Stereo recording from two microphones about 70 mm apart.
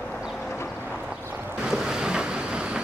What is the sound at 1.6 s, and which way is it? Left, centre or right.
Boat, centre.